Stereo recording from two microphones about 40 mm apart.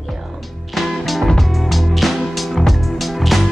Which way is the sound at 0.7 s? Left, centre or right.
Centre.